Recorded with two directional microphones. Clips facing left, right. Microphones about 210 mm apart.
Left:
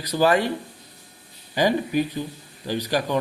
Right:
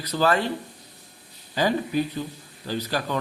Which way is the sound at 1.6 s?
15° left (ahead or behind).